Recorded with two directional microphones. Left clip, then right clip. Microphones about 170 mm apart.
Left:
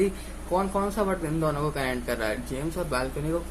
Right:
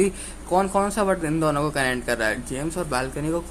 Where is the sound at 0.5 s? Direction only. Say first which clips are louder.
Right 5 dB; 70° right (ahead or behind).